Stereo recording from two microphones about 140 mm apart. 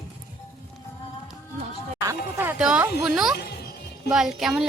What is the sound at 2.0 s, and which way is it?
A woman's voice, 15° right (ahead or behind).